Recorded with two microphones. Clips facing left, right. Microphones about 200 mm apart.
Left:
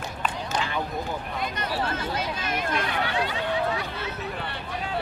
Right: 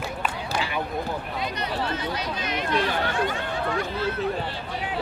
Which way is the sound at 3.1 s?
50° right (ahead or behind).